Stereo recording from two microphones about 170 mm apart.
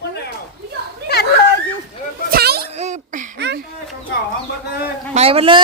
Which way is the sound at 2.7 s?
40° right (ahead or behind).